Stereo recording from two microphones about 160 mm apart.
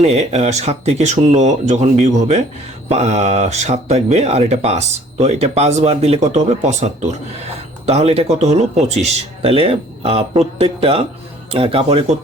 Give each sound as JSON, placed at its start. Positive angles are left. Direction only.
{"t": 0.0, "sound": "speech", "side_deg": -45}